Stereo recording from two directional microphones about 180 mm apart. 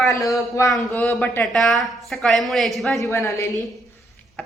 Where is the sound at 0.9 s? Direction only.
5° left (ahead or behind).